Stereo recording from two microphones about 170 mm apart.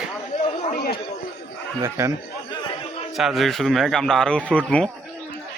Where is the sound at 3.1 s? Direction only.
Centre (ahead or behind).